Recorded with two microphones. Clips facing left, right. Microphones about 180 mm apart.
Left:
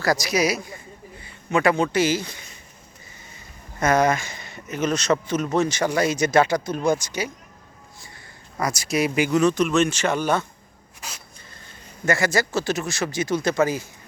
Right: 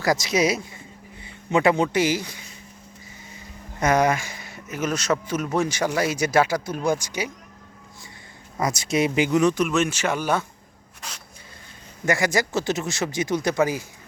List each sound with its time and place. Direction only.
0.0 s speech: 20° right (ahead or behind)
3.8 s speech: 15° right (ahead or behind)
8.5 s speech: 20° right (ahead or behind)
12.0 s speech: 15° right (ahead or behind)